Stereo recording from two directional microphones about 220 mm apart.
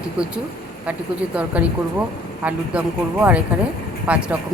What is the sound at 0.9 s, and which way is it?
Speech, 5° right (ahead or behind).